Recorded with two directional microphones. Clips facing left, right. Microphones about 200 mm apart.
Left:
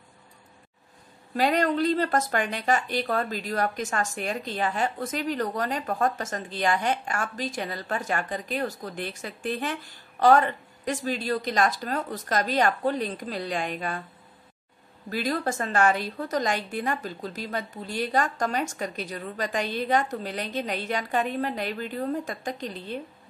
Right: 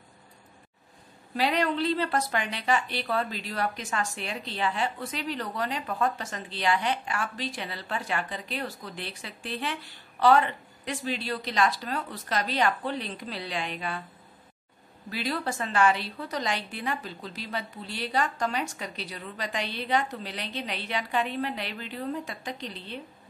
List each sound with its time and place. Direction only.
1.3 s speech: 45° left (ahead or behind)
15.0 s speech: 45° left (ahead or behind)